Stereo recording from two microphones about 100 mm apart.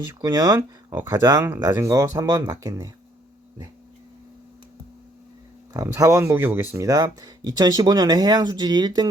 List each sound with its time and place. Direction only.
0.2 s speech: 40° right (ahead or behind)
5.7 s speech: 30° right (ahead or behind)
6.8 s speech: 40° right (ahead or behind)